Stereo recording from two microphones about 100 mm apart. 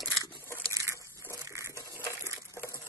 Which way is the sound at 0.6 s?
30° right (ahead or behind).